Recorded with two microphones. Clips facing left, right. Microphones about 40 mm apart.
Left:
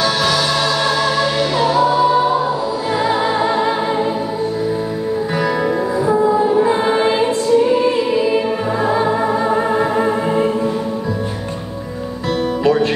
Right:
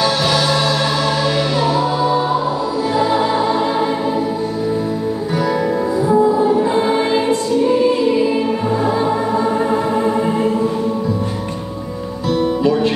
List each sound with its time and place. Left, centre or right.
1.8 s music: centre
3.0 s music: centre
5.9 s music: centre
8.8 s music: centre
12.3 s music: left